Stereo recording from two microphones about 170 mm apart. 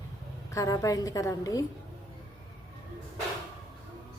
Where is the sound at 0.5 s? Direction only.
20° left (ahead or behind).